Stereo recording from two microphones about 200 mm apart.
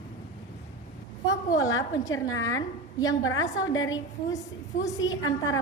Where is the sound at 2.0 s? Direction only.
15° left (ahead or behind).